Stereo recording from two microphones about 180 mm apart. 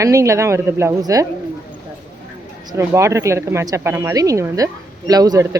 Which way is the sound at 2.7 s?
15° right (ahead or behind).